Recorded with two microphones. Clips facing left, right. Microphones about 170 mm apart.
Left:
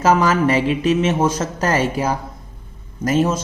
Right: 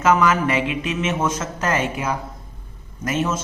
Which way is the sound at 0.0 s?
30° left (ahead or behind).